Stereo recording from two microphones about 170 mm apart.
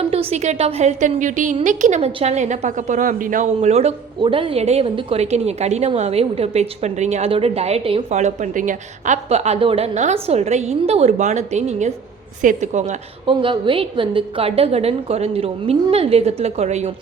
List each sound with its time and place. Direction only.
0.1 s a woman's voice: 35° right (ahead or behind)
13.4 s a woman's voice: 30° right (ahead or behind)